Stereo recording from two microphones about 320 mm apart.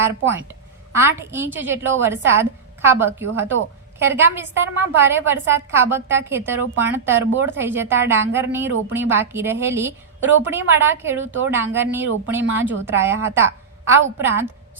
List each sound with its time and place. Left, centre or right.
0.0 s a woman's voice: centre